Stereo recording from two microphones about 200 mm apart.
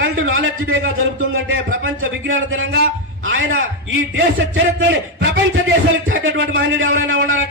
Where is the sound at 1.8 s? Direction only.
75° right (ahead or behind).